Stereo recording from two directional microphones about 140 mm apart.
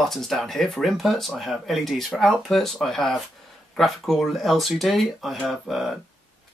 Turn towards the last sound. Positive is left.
turn(degrees=0)  # may be behind; listen again after turning